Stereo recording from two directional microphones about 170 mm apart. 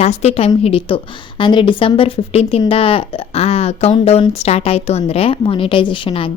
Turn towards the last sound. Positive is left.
turn(degrees=30)  # may be behind; listen again after turning